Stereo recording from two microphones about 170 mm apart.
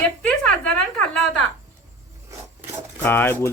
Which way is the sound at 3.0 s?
10° left (ahead or behind).